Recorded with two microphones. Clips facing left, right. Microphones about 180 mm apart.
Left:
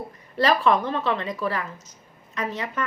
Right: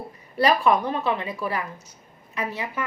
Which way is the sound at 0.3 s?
15° right (ahead or behind).